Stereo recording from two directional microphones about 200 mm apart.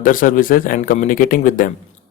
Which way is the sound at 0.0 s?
45° left (ahead or behind).